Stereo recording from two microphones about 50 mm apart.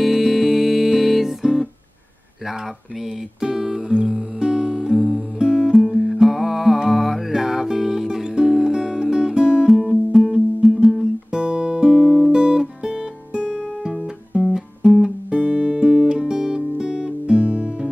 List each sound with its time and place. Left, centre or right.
0.0 s music: centre
3.3 s music: centre
5.4 s music: centre
9.7 s music: centre
11.4 s guitar: centre
14.3 s music: centre